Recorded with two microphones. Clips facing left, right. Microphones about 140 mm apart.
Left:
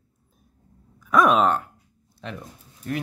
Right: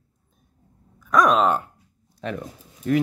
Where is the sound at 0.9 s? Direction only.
5° left (ahead or behind).